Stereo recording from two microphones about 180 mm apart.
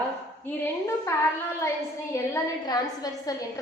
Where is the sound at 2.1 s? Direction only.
20° left (ahead or behind).